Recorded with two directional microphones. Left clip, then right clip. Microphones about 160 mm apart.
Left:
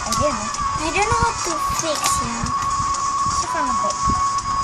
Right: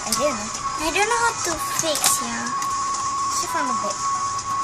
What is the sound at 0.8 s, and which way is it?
Speech, 10° left (ahead or behind).